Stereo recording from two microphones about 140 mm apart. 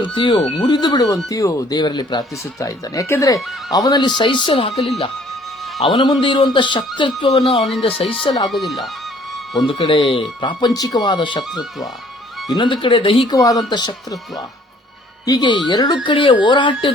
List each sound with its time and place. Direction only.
0.0 s a man's voice: 35° left (ahead or behind)
5.8 s a man's voice: 35° left (ahead or behind)
8.4 s speech: centre (ahead or behind)
9.3 s music: centre (ahead or behind)
9.6 s a man's voice: 40° left (ahead or behind)
13.3 s speech: 25° left (ahead or behind)
15.3 s a man's voice: 30° left (ahead or behind)